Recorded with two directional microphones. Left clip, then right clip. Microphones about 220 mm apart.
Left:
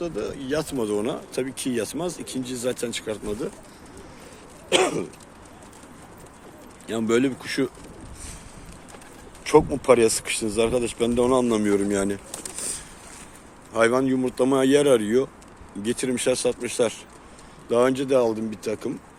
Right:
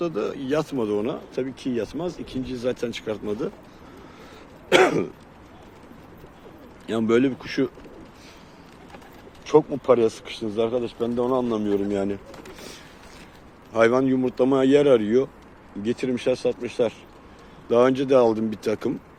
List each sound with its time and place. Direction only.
0.0 s speech: 15° right (ahead or behind)
4.7 s throat clearing: 25° right (ahead or behind)
6.8 s speech: 10° right (ahead or behind)
9.4 s speech: 15° left (ahead or behind)
13.7 s speech: 5° right (ahead or behind)
17.7 s speech: 10° right (ahead or behind)